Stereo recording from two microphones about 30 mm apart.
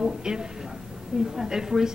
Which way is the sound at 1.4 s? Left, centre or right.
Centre.